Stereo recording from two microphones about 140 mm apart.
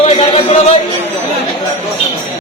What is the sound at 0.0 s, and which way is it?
Music, 45° left (ahead or behind).